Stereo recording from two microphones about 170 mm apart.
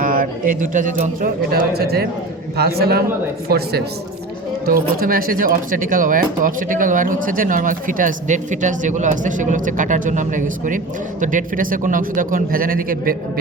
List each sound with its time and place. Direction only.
0.0 s a man's voice: 55° right (ahead or behind); by 3.8 s 70° right (ahead or behind)
4.6 s speech: 60° right (ahead or behind)